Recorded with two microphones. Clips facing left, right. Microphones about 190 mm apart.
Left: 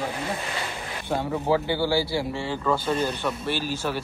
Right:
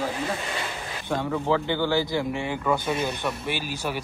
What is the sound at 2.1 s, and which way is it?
Speech, 15° right (ahead or behind).